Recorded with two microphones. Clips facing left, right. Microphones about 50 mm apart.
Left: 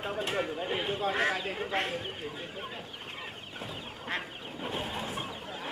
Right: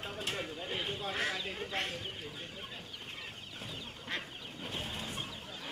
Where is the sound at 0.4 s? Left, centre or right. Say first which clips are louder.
Left 7 dB; left.